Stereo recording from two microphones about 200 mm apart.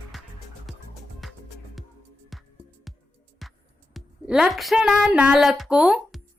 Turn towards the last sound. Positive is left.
turn(degrees=0)  # may be behind; listen again after turning